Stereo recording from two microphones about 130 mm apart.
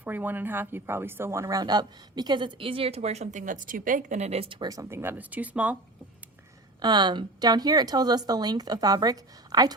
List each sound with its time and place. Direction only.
0.0 s a woman's voice: 15° right (ahead or behind); by 4.5 s 50° right (ahead or behind)
4.6 s speech: 25° right (ahead or behind)
6.8 s a woman's voice: 35° right (ahead or behind)